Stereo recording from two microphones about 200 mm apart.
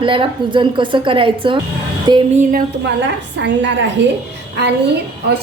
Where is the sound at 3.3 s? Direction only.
65° right (ahead or behind).